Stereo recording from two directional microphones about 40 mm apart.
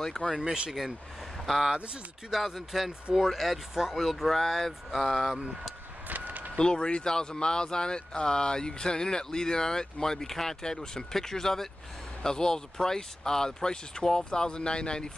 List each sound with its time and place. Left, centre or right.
0.2 s speech: centre
5.4 s speech: right
6.0 s vehicle: right
6.6 s speech: left